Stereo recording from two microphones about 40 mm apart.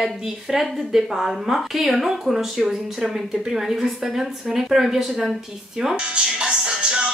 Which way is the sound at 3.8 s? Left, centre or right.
Centre.